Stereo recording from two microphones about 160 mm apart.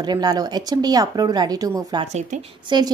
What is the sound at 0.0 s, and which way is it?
Speech, 25° right (ahead or behind).